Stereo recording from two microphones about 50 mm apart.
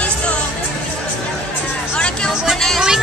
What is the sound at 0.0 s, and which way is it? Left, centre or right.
Music, left.